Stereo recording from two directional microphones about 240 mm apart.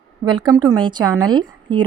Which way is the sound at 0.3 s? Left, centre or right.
Centre.